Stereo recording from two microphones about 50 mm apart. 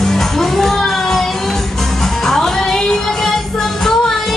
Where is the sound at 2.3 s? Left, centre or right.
Centre.